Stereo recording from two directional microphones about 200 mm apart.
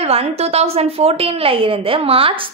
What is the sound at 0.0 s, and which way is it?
A woman's voice, 30° right (ahead or behind).